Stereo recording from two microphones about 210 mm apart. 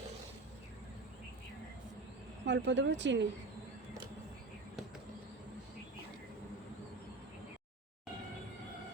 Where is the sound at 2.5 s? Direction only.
60° right (ahead or behind).